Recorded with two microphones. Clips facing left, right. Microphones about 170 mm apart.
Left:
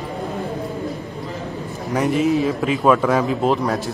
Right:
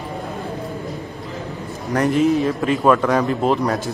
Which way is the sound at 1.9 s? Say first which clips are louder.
Right 1 dB; centre (ahead or behind).